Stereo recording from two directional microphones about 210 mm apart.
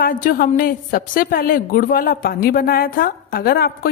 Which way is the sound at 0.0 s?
40° left (ahead or behind).